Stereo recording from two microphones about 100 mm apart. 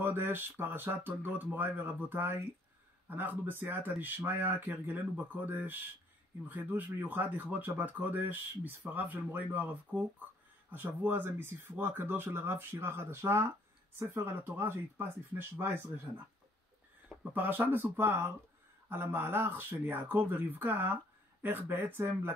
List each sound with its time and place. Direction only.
0.0 s speech: 20° right (ahead or behind)